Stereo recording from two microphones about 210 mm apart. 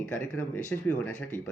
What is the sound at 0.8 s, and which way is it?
Speech, 5° left (ahead or behind).